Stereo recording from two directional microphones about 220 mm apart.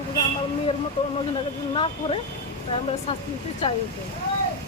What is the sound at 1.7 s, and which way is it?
Speech, 25° left (ahead or behind).